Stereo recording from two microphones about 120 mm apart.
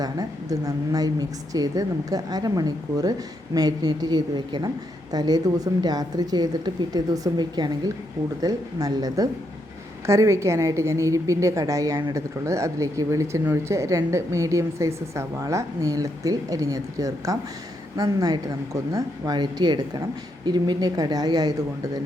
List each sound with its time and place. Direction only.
0.0 s a woman's voice: 30° right (ahead or behind)